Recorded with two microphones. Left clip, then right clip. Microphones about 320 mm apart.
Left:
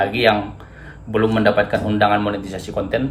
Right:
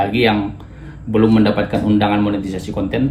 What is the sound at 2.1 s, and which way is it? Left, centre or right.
Speech, left.